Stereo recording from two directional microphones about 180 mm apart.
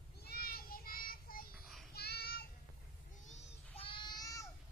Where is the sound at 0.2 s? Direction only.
60° left (ahead or behind).